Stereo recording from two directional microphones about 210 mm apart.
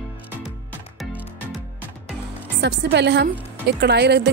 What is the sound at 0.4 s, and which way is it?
Music, centre (ahead or behind).